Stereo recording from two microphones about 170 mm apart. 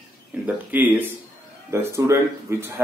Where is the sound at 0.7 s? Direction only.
10° right (ahead or behind).